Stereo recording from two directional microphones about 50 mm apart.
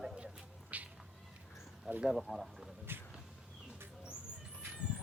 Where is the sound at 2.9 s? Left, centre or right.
Right.